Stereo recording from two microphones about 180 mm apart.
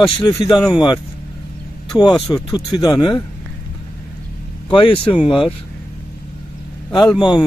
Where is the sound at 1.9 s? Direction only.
25° left (ahead or behind).